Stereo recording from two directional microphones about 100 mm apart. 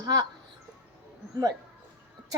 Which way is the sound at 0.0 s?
40° right (ahead or behind).